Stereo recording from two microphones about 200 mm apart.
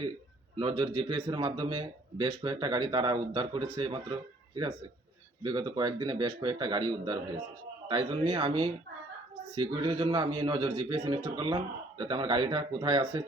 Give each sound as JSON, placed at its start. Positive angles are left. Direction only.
{"t": 0.6, "sound": "a man's voice", "side_deg": -25}